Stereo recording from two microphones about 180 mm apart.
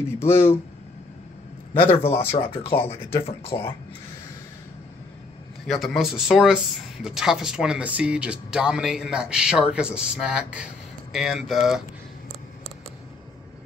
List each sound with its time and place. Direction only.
1.7 s a man's voice: 30° left (ahead or behind)
2.7 s speech: 15° left (ahead or behind)
5.7 s speech: centre (ahead or behind)